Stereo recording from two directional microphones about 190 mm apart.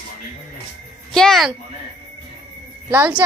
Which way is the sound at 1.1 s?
Centre (ahead or behind).